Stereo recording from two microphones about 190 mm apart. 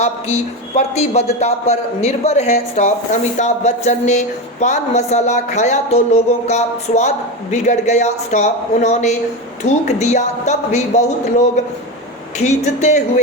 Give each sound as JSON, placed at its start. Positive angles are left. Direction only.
{"t": 0.8, "sound": "a man's voice", "side_deg": 35}